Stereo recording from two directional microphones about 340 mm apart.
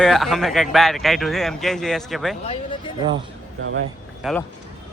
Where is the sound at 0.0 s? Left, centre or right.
Centre.